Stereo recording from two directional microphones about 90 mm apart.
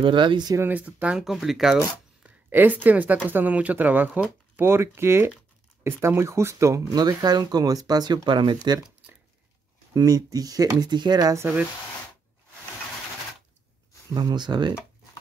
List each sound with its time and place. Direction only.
0.0 s speech: 65° right (ahead or behind)
0.6 s speech: 20° right (ahead or behind)
1.2 s speech: centre (ahead or behind)
2.2 s a woman's voice: 20° right (ahead or behind); by 7.0 s 35° right (ahead or behind)
7.0 s speech: 45° right (ahead or behind)
9.9 s speech: 45° right (ahead or behind)
14.1 s speech: 55° right (ahead or behind)